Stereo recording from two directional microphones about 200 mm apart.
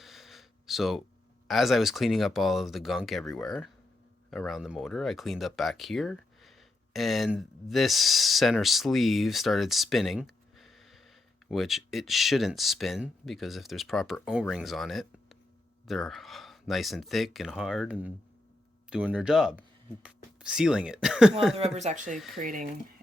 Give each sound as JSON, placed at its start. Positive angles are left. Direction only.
{"t": 0.0, "sound": "gasp", "side_deg": 0}
{"t": 1.5, "sound": "speech", "side_deg": 0}
{"t": 21.5, "sound": "speech", "side_deg": -30}